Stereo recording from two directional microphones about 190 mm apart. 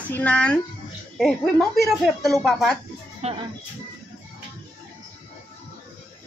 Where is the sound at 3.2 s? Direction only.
35° right (ahead or behind).